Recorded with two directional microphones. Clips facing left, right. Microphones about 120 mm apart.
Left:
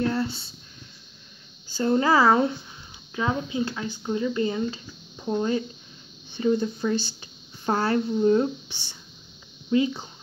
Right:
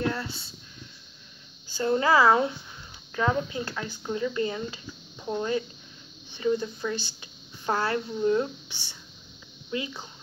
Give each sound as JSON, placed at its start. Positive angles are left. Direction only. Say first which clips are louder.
{"t": 0.1, "sound": "speech", "louder": "left 6 dB", "side_deg": 30}
{"t": 1.7, "sound": "speech", "louder": "left 2 dB", "side_deg": 30}
{"t": 3.2, "sound": "a woman's voice", "louder": "left 1 dB", "side_deg": 15}